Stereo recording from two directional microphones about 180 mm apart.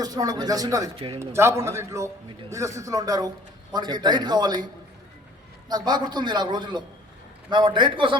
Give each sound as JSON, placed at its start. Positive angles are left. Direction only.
{"t": 0.0, "sound": "a man's voice", "side_deg": -20}